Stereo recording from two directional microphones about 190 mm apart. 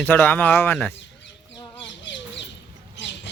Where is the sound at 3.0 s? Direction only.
65° left (ahead or behind).